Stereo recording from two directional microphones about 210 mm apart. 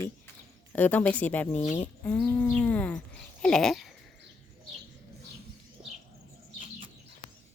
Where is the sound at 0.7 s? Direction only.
10° left (ahead or behind).